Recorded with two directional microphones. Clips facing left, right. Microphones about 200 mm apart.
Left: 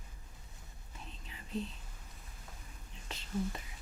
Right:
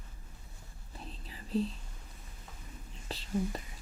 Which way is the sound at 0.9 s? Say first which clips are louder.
Right 4 dB; 35° right (ahead or behind).